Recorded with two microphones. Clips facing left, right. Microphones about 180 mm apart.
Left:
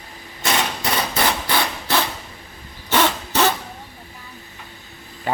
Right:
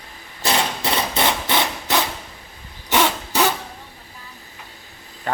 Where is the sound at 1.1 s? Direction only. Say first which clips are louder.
Even; 20° right (ahead or behind).